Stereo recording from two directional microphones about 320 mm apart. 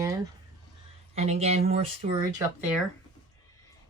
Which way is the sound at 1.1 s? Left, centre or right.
Centre.